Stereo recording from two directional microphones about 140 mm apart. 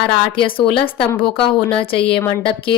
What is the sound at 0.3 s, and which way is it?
Speech, 35° left (ahead or behind).